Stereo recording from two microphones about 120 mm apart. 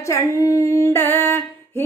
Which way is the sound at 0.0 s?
25° left (ahead or behind).